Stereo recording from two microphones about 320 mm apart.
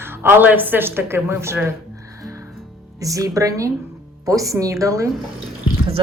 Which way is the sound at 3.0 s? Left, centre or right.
Centre.